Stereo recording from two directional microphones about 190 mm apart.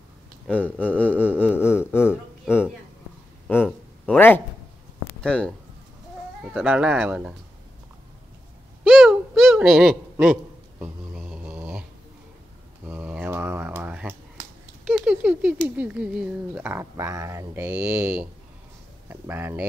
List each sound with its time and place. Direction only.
0.5 s speech: 10° left (ahead or behind)
3.4 s a sound: 10° left (ahead or behind)
6.5 s speech: 5° right (ahead or behind)
8.8 s a sound: centre (ahead or behind)
12.8 s typewriter: 10° right (ahead or behind)
14.9 s patter: 5° right (ahead or behind)
15.7 s speech: 5° right (ahead or behind)